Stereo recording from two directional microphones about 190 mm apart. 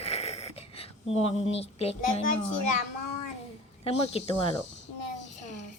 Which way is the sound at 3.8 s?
35° left (ahead or behind).